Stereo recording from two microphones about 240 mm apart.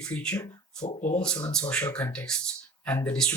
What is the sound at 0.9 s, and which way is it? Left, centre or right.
Speech, left.